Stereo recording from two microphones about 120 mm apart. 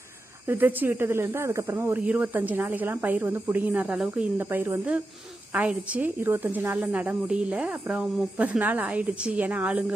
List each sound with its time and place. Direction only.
0.4 s speech: 15° right (ahead or behind)